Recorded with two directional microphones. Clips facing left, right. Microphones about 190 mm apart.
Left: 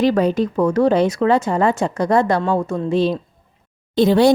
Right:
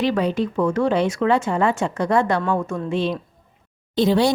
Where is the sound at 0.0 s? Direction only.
45° left (ahead or behind).